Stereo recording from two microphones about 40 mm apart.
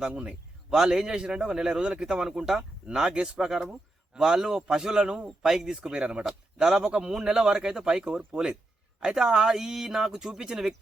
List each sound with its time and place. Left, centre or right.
0.0 s a man's voice: right
4.2 s a man's voice: centre
6.2 s a man's voice: centre